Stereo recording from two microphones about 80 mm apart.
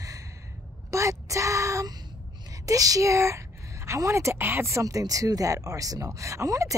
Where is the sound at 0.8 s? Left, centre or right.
Right.